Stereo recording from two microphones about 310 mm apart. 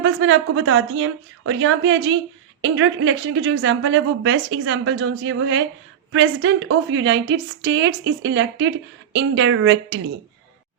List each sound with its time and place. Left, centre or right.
0.0 s a woman's voice: right